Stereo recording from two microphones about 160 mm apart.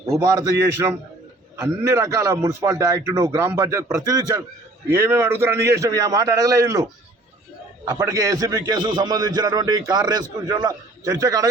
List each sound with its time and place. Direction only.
0.0 s a man's voice: 20° right (ahead or behind)
7.9 s a man's voice: 20° right (ahead or behind)